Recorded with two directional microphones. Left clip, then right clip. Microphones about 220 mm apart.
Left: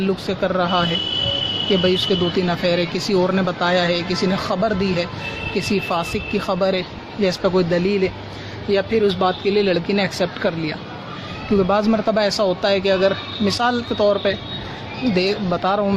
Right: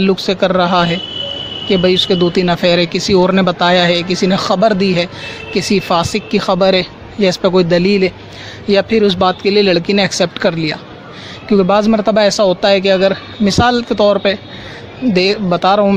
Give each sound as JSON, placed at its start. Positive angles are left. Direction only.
{"t": 0.0, "sound": "speech", "side_deg": -40}